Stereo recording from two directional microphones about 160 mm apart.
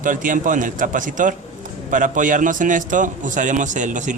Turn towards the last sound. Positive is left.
turn(degrees=-50)  # may be behind; listen again after turning